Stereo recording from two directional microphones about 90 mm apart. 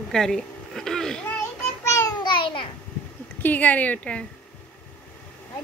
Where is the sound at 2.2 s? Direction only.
65° left (ahead or behind).